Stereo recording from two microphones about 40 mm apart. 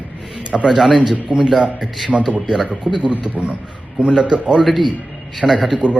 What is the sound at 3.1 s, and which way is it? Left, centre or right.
Speech, right.